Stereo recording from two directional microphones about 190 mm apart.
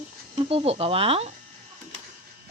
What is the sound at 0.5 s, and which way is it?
Speech, 30° right (ahead or behind).